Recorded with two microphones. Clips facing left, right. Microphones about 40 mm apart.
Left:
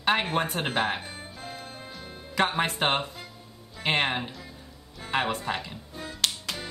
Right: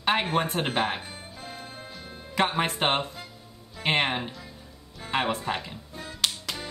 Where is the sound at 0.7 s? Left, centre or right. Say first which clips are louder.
Even; centre.